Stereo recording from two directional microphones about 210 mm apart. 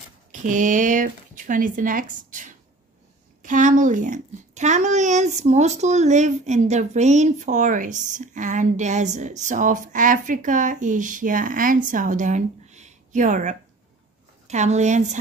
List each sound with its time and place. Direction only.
0.3 s speech: 35° right (ahead or behind)